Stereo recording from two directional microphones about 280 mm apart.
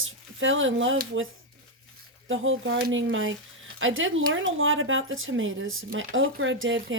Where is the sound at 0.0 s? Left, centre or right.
Right.